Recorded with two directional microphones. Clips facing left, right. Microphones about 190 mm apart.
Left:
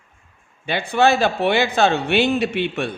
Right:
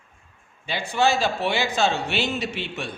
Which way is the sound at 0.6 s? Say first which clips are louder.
Left 5 dB; 60° left (ahead or behind).